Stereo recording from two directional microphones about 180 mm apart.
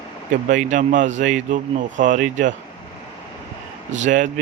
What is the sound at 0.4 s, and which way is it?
Speech, 45° right (ahead or behind).